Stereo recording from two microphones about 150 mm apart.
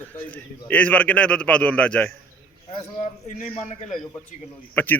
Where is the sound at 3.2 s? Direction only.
50° left (ahead or behind).